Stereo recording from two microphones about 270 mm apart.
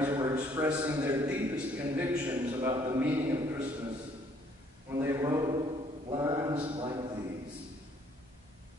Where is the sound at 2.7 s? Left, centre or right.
Centre.